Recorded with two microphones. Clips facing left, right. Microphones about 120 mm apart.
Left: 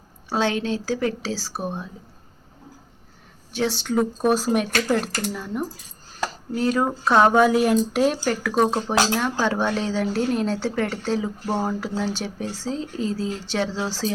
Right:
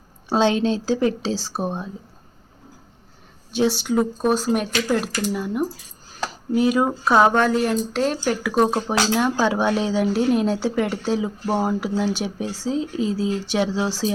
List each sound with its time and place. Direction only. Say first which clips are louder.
0.3 s speech: right 4 dB; 20° right (ahead or behind)
3.5 s speech: right 3 dB; 15° right (ahead or behind); by 4.7 s 5° left (ahead or behind)
5.3 s a woman's voice: right 5 dB; 10° right (ahead or behind)